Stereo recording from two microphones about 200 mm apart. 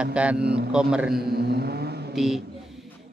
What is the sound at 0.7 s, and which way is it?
Speech, 5° right (ahead or behind).